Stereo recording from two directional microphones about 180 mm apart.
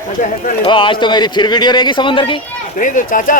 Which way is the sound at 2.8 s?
45° left (ahead or behind).